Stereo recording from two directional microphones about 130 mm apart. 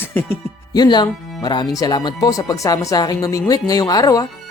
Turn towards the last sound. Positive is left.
turn(degrees=30)  # may be behind; listen again after turning